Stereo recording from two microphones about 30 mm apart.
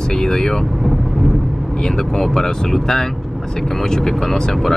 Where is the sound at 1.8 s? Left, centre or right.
Centre.